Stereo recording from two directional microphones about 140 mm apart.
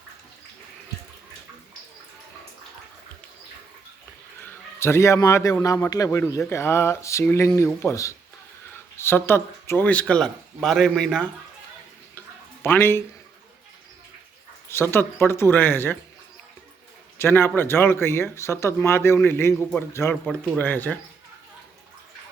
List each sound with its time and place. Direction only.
4.4 s a man's voice: 20° left (ahead or behind)
6.5 s a sound: 20° left (ahead or behind)
8.7 s speech: 15° left (ahead or behind)
12.6 s speech: 15° left (ahead or behind)
14.7 s speech: 15° left (ahead or behind)
17.2 s speech: 15° left (ahead or behind)